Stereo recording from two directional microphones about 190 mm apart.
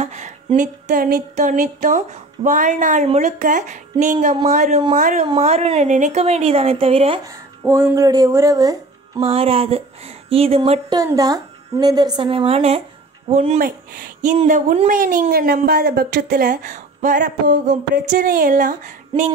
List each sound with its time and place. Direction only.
0.0 s a sound: 35° right (ahead or behind)
1.3 s a woman's voice: 40° right (ahead or behind)
7.2 s a woman's voice: 15° right (ahead or behind); by 13.6 s 35° right (ahead or behind)
13.6 s speech: 45° right (ahead or behind)